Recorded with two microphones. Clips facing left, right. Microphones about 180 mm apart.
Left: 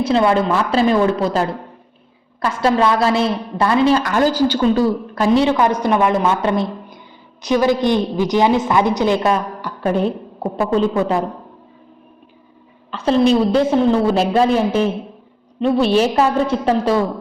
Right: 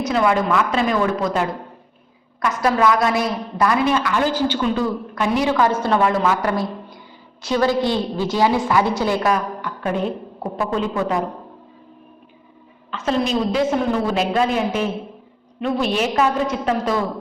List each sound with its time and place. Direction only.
0.0 s a woman's voice: 30° left (ahead or behind)
4.0 s a woman's voice: 40° left (ahead or behind)
12.9 s a woman's voice: 30° left (ahead or behind)